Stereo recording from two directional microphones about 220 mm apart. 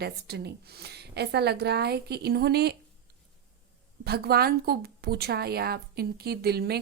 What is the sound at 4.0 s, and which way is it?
A woman's voice, 45° right (ahead or behind).